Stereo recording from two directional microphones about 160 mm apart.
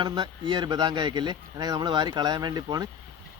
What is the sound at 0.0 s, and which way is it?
Speech, 30° right (ahead or behind).